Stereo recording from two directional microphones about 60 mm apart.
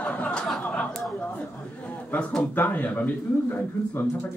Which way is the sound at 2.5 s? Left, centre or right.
Left.